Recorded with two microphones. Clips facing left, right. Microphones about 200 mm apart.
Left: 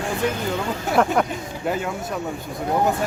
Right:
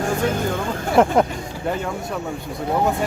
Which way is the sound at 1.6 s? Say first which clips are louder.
Even; 5° left (ahead or behind).